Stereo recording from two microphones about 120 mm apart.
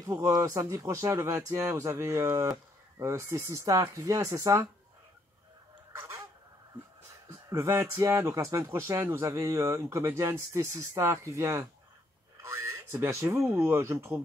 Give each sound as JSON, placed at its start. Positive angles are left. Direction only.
{"t": 0.0, "sound": "speech", "side_deg": -30}
{"t": 5.9, "sound": "goose", "side_deg": -20}
{"t": 7.2, "sound": "speech", "side_deg": -20}